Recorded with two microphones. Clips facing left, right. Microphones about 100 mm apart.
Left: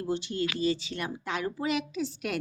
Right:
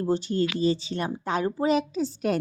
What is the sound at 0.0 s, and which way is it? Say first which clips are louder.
A woman's voice: right 6 dB; 40° right (ahead or behind).